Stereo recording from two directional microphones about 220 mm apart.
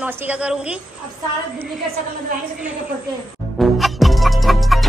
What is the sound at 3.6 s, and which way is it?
Music, centre (ahead or behind).